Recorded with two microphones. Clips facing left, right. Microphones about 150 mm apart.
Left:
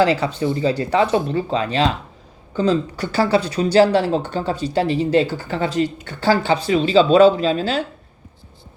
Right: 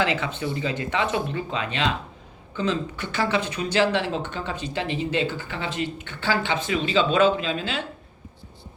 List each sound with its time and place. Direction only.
0.0 s speech: 35° left (ahead or behind)